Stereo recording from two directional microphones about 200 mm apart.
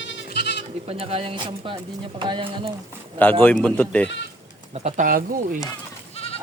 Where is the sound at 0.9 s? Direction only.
30° right (ahead or behind).